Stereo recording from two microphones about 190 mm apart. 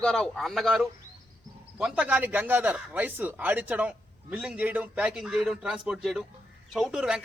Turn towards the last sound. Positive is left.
turn(degrees=-5)  # may be behind; listen again after turning